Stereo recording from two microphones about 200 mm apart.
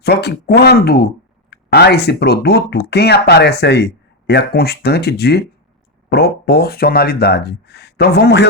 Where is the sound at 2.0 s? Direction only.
55° left (ahead or behind).